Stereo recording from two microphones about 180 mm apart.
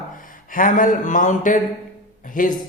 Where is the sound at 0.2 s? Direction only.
50° left (ahead or behind).